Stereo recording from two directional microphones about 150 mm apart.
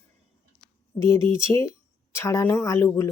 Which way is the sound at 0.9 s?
20° left (ahead or behind).